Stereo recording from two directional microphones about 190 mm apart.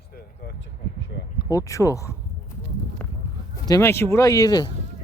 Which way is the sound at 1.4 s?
15° left (ahead or behind).